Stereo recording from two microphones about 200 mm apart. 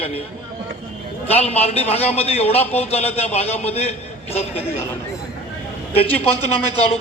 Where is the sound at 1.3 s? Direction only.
30° left (ahead or behind).